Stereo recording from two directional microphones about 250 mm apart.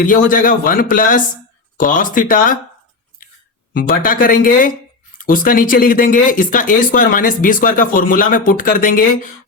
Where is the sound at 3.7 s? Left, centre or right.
Left.